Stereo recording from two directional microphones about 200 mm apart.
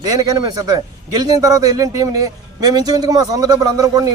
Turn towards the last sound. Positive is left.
turn(degrees=-20)  # may be behind; listen again after turning